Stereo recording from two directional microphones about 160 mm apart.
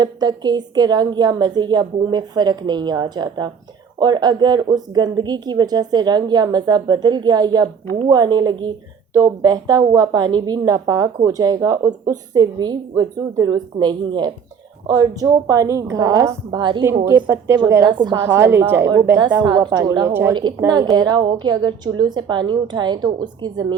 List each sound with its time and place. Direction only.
0.0 s a woman's voice: 25° right (ahead or behind)
16.5 s a woman's voice: 30° right (ahead or behind)
17.1 s a woman's voice: 15° right (ahead or behind)
18.2 s a woman's voice: 15° right (ahead or behind)
19.4 s a woman's voice: 25° right (ahead or behind)